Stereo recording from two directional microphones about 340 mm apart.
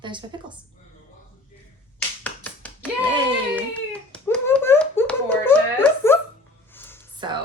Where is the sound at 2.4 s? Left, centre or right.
Centre.